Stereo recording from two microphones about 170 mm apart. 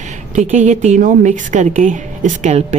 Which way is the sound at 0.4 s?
45° right (ahead or behind).